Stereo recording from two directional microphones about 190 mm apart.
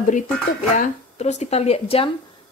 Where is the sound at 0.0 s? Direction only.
40° left (ahead or behind).